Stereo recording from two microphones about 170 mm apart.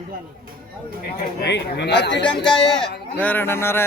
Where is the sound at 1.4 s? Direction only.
90° left.